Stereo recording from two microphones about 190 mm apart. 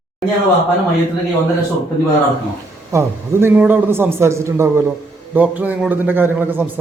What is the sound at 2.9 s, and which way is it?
A man's voice, 15° right (ahead or behind).